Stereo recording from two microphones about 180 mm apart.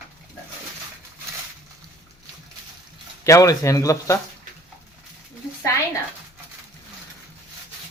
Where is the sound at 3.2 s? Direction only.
20° left (ahead or behind).